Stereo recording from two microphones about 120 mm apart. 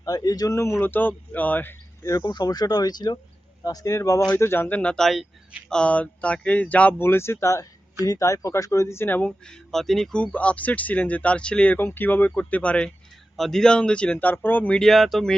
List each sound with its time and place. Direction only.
0.0 s speech: 30° left (ahead or behind)
0.8 s speech: 15° left (ahead or behind)
2.0 s speech: 30° left (ahead or behind); by 14.8 s 15° left (ahead or behind)
14.8 s speech: centre (ahead or behind)